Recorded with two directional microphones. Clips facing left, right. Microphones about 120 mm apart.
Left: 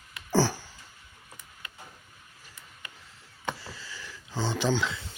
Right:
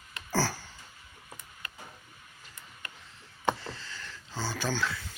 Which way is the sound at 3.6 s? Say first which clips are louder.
Right 1 dB; 5° left (ahead or behind).